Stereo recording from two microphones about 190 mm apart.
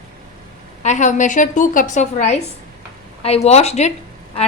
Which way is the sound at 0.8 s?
40° left (ahead or behind).